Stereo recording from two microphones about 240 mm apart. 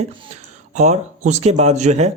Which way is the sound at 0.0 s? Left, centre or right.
Right.